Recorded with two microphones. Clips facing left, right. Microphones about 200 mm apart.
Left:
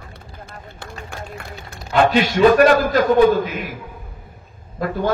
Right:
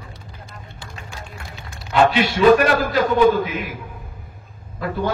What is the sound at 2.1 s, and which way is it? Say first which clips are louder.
A man's voice: left 1 dB; 45° left (ahead or behind).